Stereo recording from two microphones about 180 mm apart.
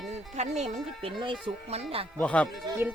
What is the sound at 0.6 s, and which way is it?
Speech, 30° right (ahead or behind).